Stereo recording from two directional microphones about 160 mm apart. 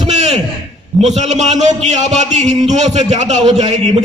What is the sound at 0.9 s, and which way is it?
A man's voice, 45° right (ahead or behind).